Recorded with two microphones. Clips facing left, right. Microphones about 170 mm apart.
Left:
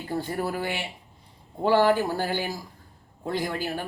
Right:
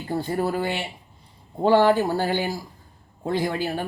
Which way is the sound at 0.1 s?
20° right (ahead or behind).